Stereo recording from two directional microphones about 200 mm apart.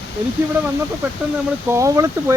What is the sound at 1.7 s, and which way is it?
Speech, 15° right (ahead or behind).